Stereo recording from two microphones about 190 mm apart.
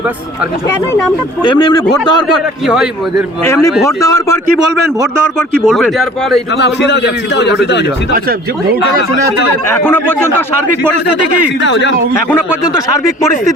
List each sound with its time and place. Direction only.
1.4 s speech: 25° left (ahead or behind)
2.6 s speech: centre (ahead or behind)
3.4 s a man's voice: 15° left (ahead or behind)
5.6 s speech: centre (ahead or behind)
6.6 s a man's voice: 65° left (ahead or behind)
8.1 s speech: 50° right (ahead or behind)
9.6 s a man's voice: 10° left (ahead or behind)
11.6 s speech: 70° left (ahead or behind)